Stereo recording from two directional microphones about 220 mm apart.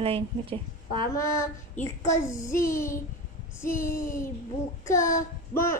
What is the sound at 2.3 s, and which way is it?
Child singing, 15° left (ahead or behind).